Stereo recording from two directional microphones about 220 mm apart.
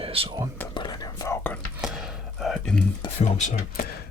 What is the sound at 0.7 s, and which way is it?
Whispering, 20° left (ahead or behind).